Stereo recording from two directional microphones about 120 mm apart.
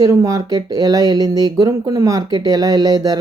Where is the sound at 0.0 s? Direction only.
25° right (ahead or behind).